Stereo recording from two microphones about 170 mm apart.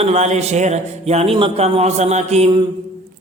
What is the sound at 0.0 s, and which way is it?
Speech, 40° right (ahead or behind).